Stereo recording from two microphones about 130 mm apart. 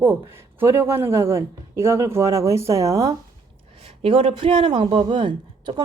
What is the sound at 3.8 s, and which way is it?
Speech, 50° right (ahead or behind).